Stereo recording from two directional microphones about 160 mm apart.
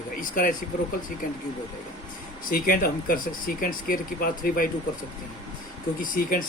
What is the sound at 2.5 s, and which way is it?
Speech, 65° left (ahead or behind).